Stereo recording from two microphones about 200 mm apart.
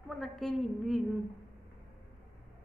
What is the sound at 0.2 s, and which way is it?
Speech, centre (ahead or behind).